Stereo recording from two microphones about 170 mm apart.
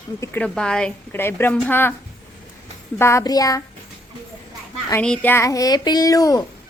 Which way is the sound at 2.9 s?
15° left (ahead or behind).